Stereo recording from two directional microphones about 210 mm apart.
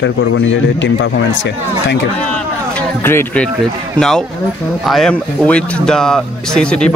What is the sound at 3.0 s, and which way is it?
Speech, 10° left (ahead or behind).